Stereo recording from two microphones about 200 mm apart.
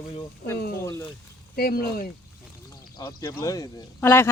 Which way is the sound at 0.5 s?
50° left (ahead or behind).